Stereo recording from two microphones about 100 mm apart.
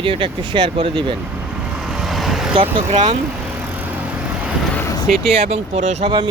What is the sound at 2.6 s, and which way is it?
Speech, 70° right (ahead or behind).